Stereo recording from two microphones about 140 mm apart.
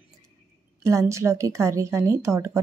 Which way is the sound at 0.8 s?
20° right (ahead or behind).